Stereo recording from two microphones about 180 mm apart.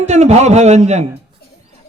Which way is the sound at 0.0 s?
40° right (ahead or behind).